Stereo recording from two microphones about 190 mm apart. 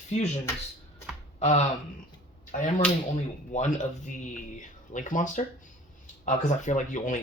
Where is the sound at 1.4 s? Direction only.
35° left (ahead or behind).